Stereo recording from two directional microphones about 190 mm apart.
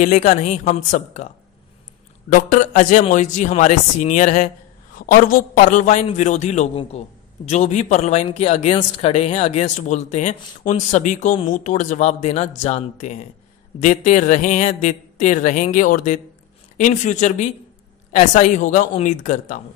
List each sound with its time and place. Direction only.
0.0 s speech: 40° left (ahead or behind)